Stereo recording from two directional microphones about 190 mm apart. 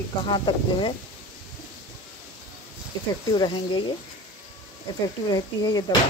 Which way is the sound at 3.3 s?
25° left (ahead or behind).